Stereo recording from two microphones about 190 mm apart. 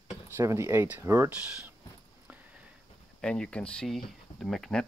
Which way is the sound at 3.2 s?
5° left (ahead or behind).